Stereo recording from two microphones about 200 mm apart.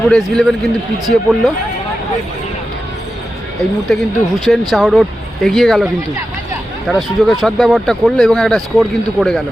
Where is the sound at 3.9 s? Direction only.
Centre (ahead or behind).